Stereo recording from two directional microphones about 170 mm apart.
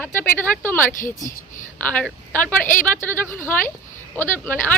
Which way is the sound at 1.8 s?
10° left (ahead or behind).